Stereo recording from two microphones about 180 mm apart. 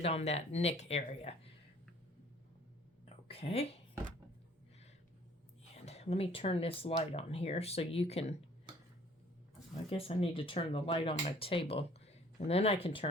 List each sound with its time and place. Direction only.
0.0 s speech: 35° left (ahead or behind)
3.2 s a sound: 35° left (ahead or behind)
5.7 s speech: 35° left (ahead or behind)
9.9 s speech: 30° left (ahead or behind)